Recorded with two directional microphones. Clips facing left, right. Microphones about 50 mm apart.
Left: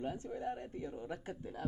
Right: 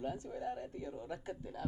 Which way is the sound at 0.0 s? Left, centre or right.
Left.